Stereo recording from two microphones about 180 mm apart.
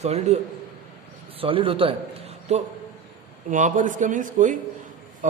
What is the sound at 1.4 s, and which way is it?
Speech, 30° right (ahead or behind).